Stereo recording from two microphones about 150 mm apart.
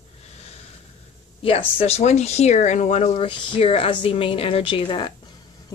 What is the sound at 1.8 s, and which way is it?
Speech, 45° left (ahead or behind).